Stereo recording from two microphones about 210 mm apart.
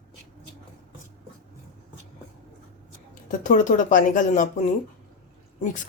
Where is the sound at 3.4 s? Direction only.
35° left (ahead or behind).